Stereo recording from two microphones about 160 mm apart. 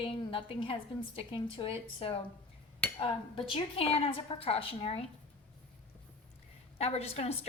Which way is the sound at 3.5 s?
35° left (ahead or behind).